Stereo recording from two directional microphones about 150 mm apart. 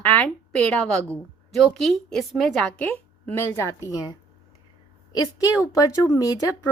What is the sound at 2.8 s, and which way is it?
Speech, 15° left (ahead or behind).